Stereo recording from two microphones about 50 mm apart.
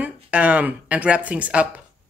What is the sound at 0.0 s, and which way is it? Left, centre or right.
Speech, right.